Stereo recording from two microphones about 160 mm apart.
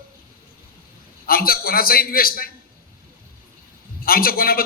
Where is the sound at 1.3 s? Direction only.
65° left (ahead or behind).